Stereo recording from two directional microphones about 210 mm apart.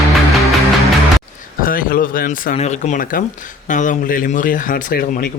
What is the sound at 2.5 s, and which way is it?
Speech, 30° left (ahead or behind).